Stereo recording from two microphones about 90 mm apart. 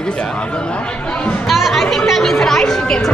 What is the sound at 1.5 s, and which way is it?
Speech, centre (ahead or behind).